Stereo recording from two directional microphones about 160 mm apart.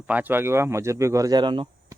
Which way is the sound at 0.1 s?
10° right (ahead or behind).